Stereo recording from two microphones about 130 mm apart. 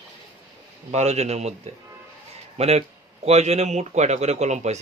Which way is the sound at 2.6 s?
55° right (ahead or behind).